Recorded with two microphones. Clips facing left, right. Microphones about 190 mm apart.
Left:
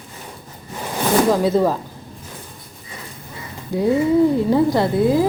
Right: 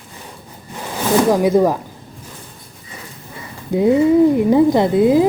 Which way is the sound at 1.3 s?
15° right (ahead or behind).